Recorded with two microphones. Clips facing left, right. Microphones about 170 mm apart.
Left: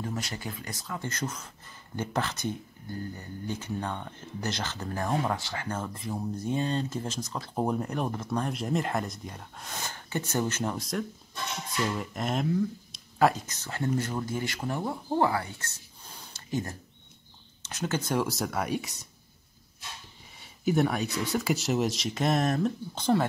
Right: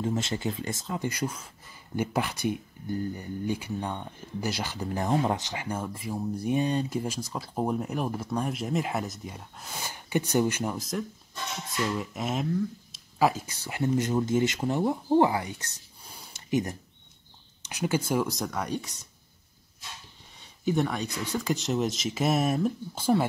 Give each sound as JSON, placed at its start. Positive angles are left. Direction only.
{"t": 0.0, "sound": "speech", "side_deg": -25}
{"t": 15.1, "sound": "a sound", "side_deg": -20}
{"t": 17.6, "sound": "speech", "side_deg": -15}
{"t": 20.6, "sound": "speech", "side_deg": 5}